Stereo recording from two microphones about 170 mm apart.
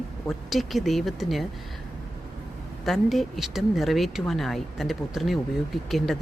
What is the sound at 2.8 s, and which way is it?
Speech, centre (ahead or behind).